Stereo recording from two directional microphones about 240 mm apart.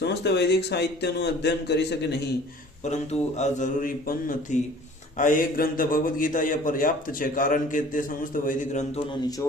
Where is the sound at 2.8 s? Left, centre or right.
Left.